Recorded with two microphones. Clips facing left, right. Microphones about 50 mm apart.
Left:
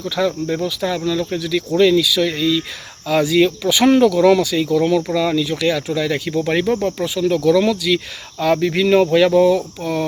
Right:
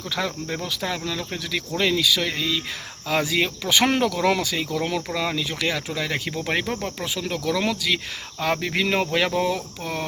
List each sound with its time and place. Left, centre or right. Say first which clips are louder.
0.0 s speech: left 8 dB; right
1.4 s speech: left 10 dB; right
5.1 s speech: left 8 dB; centre
6.8 s cricket: left 10 dB; centre
7.6 s speech: left 7 dB; right